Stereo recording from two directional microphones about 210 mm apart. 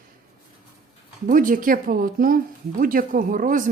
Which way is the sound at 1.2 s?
40° right (ahead or behind).